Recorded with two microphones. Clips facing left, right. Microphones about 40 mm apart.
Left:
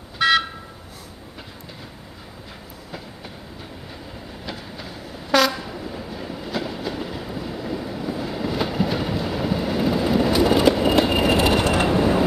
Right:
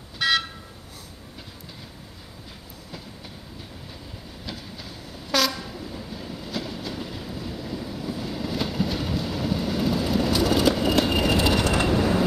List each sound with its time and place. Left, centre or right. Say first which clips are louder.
0.2 s vehicle: left 5 dB; centre
4.5 s train: left 3 dB; centre; by 11.9 s left
11.9 s train: left 3 dB; centre